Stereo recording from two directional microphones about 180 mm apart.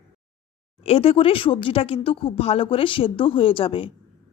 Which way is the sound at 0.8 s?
30° left (ahead or behind).